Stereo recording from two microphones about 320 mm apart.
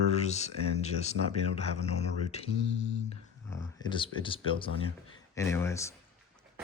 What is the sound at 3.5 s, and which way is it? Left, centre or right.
Speech, centre.